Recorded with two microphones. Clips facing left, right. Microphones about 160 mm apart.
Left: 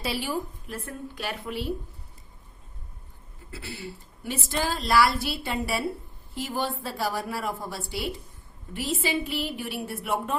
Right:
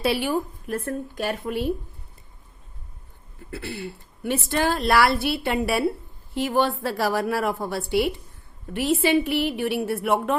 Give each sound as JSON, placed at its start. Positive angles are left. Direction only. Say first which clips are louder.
{"t": 0.0, "sound": "speech", "louder": "right 7 dB", "side_deg": -60}
{"t": 3.5, "sound": "a woman's voice", "louder": "right 6 dB", "side_deg": -55}